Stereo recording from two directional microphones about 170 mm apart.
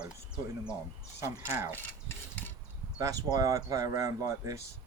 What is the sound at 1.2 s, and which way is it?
Speech, 15° right (ahead or behind).